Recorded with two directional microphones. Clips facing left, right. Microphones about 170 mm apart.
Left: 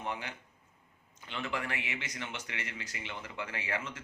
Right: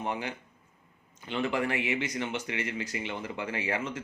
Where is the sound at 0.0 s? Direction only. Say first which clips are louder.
Right 5 dB; 20° right (ahead or behind).